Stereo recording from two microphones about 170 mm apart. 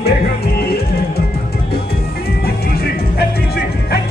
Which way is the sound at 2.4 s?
70° left (ahead or behind).